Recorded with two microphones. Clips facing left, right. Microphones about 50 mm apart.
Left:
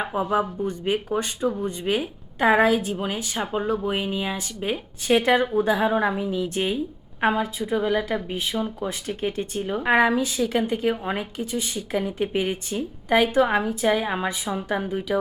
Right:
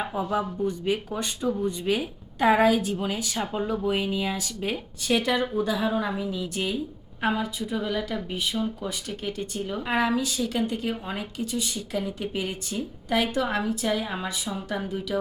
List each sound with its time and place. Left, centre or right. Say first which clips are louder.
0.0 s a woman's voice: left 4 dB; left
9.6 s a woman's voice: left 4 dB; centre
9.8 s a woman's voice: left 6 dB; left